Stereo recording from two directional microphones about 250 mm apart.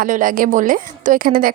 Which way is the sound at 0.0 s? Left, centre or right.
Right.